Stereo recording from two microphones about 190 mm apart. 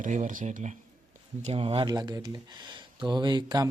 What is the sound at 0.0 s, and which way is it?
Speech, 40° right (ahead or behind).